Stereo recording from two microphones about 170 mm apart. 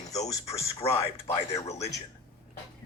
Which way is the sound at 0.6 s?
35° left (ahead or behind).